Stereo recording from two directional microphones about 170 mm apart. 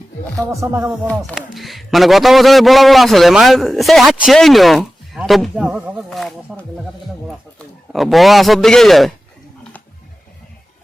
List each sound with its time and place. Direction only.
0.5 s music: 15° right (ahead or behind)
1.4 s a man's voice: centre (ahead or behind)
7.9 s a man's voice: centre (ahead or behind)